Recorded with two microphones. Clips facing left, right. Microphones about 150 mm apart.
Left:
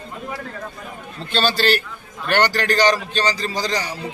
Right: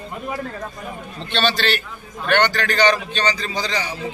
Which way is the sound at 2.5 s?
35° left (ahead or behind).